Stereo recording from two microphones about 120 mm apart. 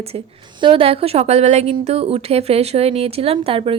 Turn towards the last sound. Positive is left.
turn(degrees=-50)  # may be behind; listen again after turning